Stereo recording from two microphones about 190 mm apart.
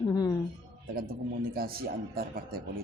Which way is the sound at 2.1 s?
50° right (ahead or behind).